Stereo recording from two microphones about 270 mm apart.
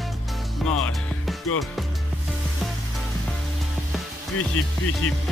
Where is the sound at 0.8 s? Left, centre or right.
Centre.